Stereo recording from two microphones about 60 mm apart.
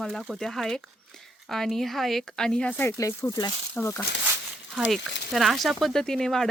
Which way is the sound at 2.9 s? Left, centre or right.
Left.